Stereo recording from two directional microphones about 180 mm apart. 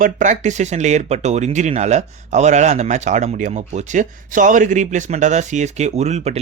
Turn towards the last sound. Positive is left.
turn(degrees=-35)  # may be behind; listen again after turning